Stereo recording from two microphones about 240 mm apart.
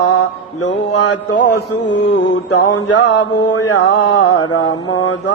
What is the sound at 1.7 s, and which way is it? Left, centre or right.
Mantra, left.